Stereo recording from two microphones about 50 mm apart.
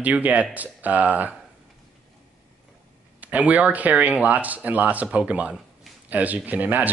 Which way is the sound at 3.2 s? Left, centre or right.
Right.